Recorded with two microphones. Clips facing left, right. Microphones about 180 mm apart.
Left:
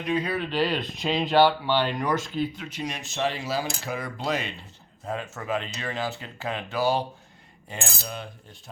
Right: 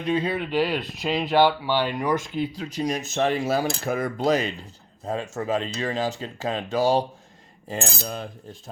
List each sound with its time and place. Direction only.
0.0 s speech: 25° right (ahead or behind)
0.5 s speech: 10° right (ahead or behind)
2.6 s cutlery: 35° right (ahead or behind)
5.0 s speech: 35° right (ahead or behind)